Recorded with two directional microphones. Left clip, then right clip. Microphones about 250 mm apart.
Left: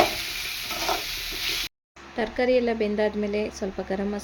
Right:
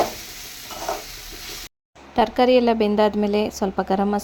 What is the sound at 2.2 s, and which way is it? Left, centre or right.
A woman's voice, right.